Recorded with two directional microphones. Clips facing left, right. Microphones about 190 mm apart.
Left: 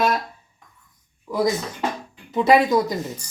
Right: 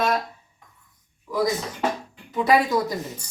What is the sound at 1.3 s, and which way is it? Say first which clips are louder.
Speech: left 2 dB; 30° left (ahead or behind).